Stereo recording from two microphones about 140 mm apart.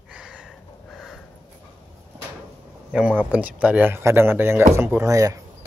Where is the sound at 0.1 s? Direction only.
5° right (ahead or behind).